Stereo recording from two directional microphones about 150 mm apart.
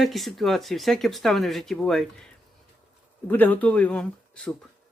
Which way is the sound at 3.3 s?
10° left (ahead or behind).